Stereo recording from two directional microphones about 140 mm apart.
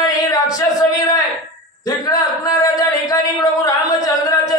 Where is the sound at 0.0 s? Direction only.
25° left (ahead or behind).